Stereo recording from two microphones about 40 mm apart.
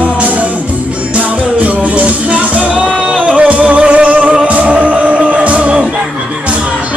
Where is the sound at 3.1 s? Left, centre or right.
Right.